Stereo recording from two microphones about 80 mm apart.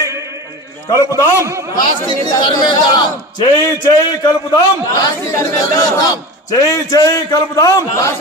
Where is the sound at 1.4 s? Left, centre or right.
Right.